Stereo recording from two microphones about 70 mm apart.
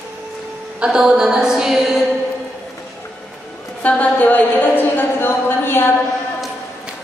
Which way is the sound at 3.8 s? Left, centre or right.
Left.